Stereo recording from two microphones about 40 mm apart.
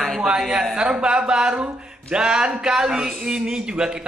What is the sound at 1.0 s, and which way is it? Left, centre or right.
A man's voice, right.